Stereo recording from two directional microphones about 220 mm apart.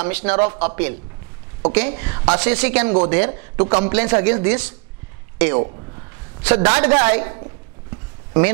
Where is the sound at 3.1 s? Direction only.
20° right (ahead or behind).